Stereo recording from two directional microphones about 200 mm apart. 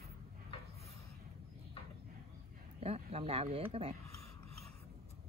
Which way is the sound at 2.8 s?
30° right (ahead or behind).